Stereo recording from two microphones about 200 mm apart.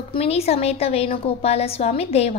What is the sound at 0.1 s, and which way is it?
A woman's voice, 30° left (ahead or behind).